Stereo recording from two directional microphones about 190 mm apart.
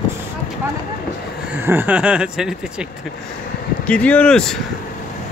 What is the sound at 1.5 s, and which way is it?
Speech, 10° right (ahead or behind).